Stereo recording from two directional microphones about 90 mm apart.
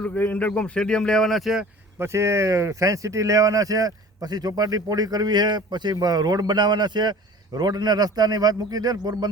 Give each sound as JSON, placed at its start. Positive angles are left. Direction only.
{"t": 0.0, "sound": "a man's voice", "side_deg": 20}
{"t": 2.0, "sound": "speech", "side_deg": -30}